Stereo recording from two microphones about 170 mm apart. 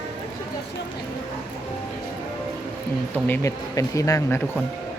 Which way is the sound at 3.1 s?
15° left (ahead or behind).